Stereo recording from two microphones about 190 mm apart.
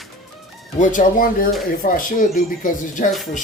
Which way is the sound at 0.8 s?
45° left (ahead or behind).